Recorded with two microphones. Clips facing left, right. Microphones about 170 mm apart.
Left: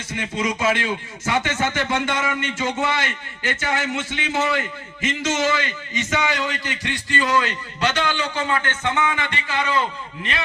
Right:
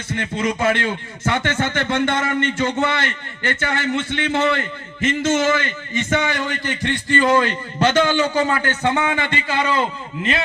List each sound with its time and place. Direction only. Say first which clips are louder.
0.1 s a man's voice: right 3 dB; 55° right (ahead or behind); by 9.8 s 30° right (ahead or behind)